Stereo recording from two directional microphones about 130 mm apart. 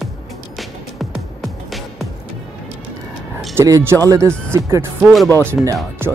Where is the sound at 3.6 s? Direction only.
20° right (ahead or behind).